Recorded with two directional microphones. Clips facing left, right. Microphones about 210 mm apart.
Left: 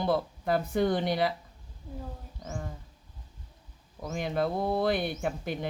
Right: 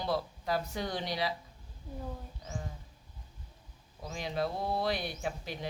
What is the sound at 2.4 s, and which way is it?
Music, 50° left (ahead or behind).